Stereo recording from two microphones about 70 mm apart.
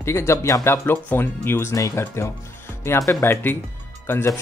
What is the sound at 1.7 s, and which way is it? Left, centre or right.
Speech, left.